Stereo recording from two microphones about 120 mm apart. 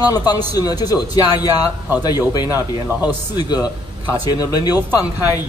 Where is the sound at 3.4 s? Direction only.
35° left (ahead or behind).